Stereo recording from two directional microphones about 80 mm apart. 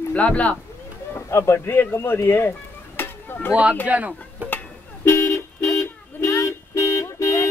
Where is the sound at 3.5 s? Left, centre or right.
Centre.